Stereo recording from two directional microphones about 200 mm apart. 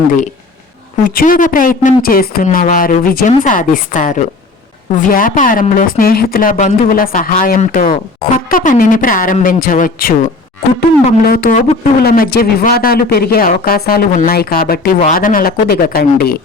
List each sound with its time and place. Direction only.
1.1 s a woman's voice: 40° left (ahead or behind)